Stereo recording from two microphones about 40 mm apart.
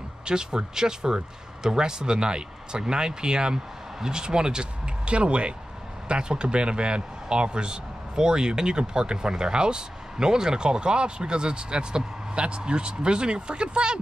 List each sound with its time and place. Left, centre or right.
0.2 s a man's voice: centre